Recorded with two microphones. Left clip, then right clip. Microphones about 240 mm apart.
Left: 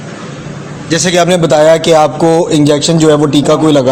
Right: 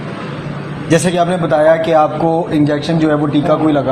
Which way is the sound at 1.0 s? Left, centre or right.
Left.